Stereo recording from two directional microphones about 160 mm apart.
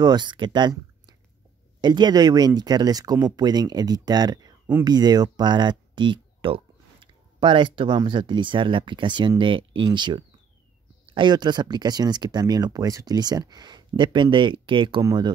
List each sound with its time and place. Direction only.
0.0 s speech: 25° right (ahead or behind)